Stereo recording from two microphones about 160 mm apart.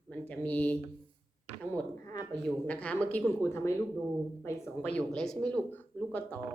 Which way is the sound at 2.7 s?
10° left (ahead or behind).